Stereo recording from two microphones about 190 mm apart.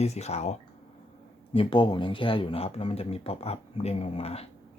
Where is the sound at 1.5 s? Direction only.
25° left (ahead or behind).